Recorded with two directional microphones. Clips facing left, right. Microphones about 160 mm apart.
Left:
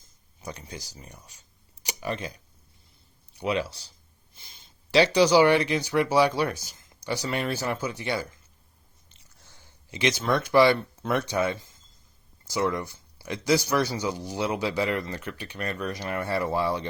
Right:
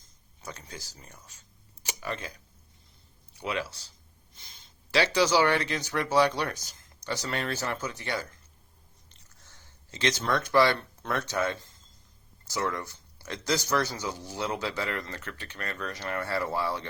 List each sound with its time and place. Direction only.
0.4 s speech: 15° left (ahead or behind)
1.8 s a sound: 15° left (ahead or behind)
3.4 s speech: 15° left (ahead or behind)
9.4 s speech: 10° left (ahead or behind)